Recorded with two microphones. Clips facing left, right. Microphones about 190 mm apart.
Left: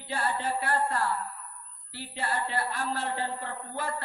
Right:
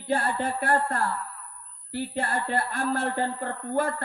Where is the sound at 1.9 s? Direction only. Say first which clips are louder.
Right 5 dB; 50° right (ahead or behind).